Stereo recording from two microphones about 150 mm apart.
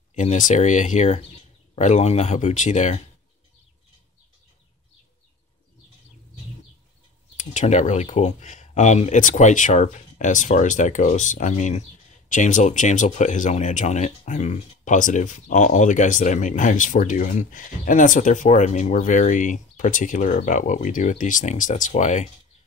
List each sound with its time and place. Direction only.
0.1 s speech: 55° left (ahead or behind)
7.3 s speech: 55° left (ahead or behind)